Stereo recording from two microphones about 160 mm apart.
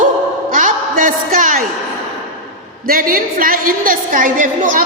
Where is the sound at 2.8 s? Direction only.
65° right (ahead or behind).